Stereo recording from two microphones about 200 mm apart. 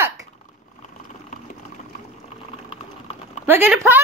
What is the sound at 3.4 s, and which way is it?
Speech, 10° right (ahead or behind).